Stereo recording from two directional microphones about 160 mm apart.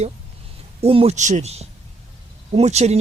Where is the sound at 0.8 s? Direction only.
40° right (ahead or behind).